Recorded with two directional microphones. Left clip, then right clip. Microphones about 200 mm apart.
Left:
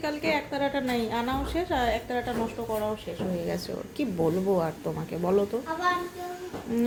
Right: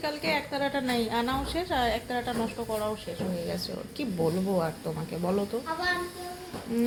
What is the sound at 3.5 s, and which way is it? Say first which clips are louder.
A woman's voice: left 2 dB; 20° left (ahead or behind).